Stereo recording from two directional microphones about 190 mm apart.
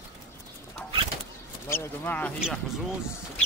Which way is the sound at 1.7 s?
10° left (ahead or behind).